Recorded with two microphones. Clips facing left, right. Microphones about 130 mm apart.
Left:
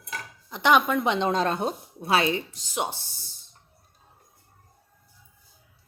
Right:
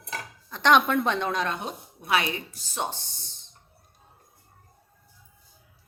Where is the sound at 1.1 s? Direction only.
20° left (ahead or behind).